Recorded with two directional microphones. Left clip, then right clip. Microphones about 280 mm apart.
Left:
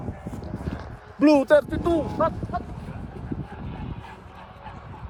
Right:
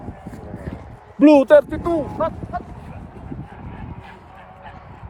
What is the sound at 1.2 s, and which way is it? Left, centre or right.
Speech, right.